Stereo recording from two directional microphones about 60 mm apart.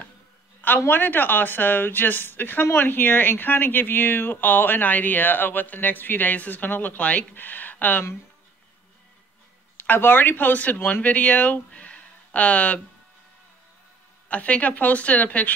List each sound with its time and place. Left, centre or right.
0.7 s speech: left
9.8 s speech: left
14.3 s speech: left